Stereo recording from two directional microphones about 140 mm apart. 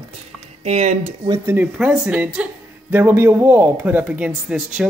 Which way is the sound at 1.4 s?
10° right (ahead or behind).